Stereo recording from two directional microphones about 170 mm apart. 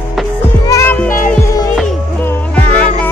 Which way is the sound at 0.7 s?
20° left (ahead or behind).